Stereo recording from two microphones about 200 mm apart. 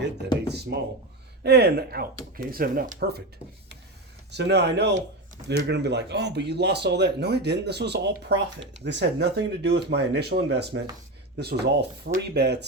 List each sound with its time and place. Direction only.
0.4 s speech: 55° right (ahead or behind)
4.3 s speech: 60° right (ahead or behind)